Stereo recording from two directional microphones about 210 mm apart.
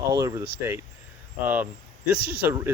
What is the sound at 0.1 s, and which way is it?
Speech, 15° right (ahead or behind).